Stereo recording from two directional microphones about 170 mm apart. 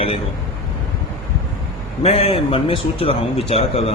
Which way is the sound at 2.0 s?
35° left (ahead or behind).